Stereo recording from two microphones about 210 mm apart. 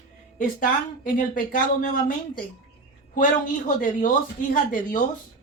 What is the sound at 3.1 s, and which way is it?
A woman's voice, 40° left (ahead or behind).